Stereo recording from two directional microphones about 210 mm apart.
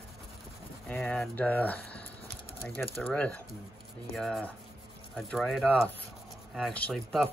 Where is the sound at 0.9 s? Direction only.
10° left (ahead or behind).